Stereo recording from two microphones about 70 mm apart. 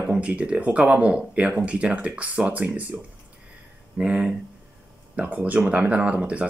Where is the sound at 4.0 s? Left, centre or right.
Centre.